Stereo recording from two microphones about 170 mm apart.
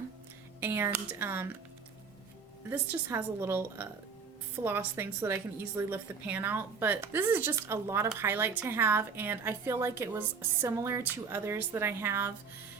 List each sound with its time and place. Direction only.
0.6 s a woman's voice: 15° right (ahead or behind)
2.6 s a woman's voice: 10° right (ahead or behind)